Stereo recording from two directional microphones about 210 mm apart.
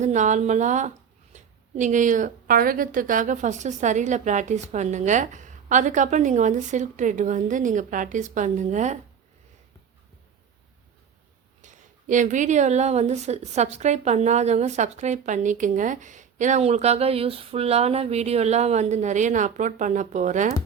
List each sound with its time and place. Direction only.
0.0 s speech: 35° right (ahead or behind)
11.6 s speech: 35° right (ahead or behind)